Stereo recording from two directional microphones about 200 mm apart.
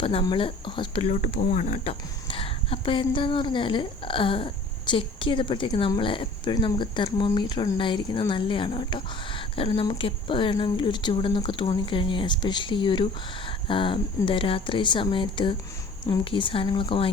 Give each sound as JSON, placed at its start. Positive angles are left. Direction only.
{"t": 0.0, "sound": "speech", "side_deg": 30}
{"t": 1.1, "sound": "speech", "side_deg": 40}